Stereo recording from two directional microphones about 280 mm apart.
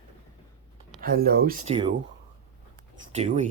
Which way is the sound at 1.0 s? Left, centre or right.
Right.